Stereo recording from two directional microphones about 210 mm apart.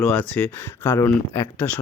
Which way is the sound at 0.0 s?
5° left (ahead or behind).